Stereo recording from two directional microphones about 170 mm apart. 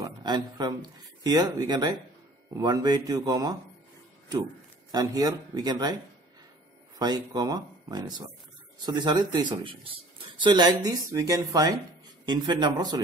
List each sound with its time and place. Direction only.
0.0 s speech: 25° right (ahead or behind)
4.9 s speech: 20° right (ahead or behind)
7.0 s speech: 25° right (ahead or behind)